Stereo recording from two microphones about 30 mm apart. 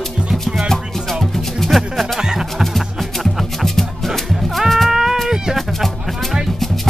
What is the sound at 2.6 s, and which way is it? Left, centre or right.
Music, centre.